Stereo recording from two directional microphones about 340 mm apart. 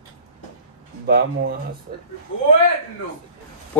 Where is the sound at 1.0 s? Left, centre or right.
Right.